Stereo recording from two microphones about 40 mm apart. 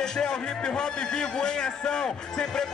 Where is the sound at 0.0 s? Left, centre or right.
Centre.